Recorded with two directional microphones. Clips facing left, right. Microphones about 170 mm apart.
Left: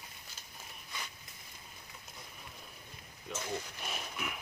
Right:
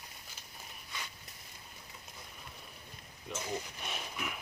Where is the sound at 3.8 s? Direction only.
Centre (ahead or behind).